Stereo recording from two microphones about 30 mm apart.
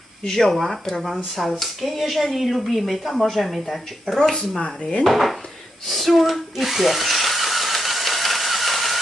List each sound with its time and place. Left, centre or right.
0.3 s speech: centre
0.5 s speech: centre
4.6 s dishes: left
5.1 s speech: centre
5.9 s drill: centre